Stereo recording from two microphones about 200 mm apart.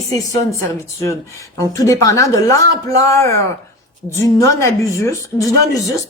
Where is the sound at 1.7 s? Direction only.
15° left (ahead or behind).